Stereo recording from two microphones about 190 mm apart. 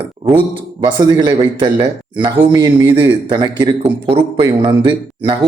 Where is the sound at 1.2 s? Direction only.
25° right (ahead or behind).